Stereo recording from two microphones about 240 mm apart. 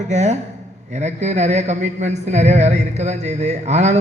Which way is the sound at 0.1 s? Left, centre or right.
Right.